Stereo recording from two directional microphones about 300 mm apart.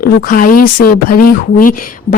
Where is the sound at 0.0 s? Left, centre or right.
Left.